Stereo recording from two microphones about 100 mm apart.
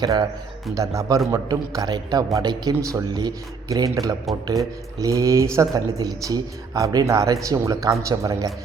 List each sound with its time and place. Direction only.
0.0 s speech: 40° right (ahead or behind)